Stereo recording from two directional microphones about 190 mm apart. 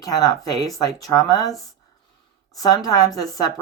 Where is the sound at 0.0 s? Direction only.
20° left (ahead or behind).